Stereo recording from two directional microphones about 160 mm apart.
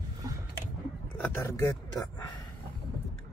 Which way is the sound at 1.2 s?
15° left (ahead or behind).